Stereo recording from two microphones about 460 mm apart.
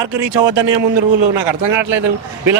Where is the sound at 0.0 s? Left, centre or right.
Right.